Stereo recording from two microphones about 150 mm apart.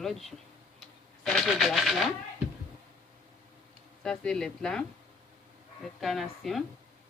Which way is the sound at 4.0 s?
5° left (ahead or behind).